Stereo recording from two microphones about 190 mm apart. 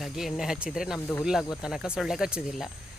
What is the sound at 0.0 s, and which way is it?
Speech, centre (ahead or behind).